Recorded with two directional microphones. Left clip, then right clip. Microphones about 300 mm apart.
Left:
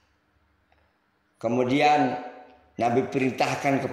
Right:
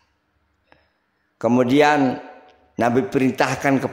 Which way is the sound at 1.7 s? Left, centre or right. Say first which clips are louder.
Right 3 dB; right.